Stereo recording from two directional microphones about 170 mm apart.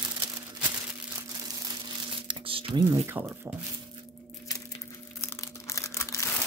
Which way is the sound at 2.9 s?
15° right (ahead or behind).